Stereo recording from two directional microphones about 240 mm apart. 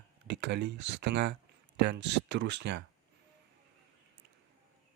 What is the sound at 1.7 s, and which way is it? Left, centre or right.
Speech, right.